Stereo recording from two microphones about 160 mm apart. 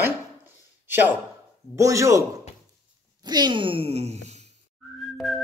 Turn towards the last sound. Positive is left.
turn(degrees=0)  # may be behind; listen again after turning